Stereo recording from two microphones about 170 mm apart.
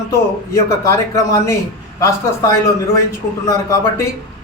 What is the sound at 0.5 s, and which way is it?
A man's voice, 20° left (ahead or behind).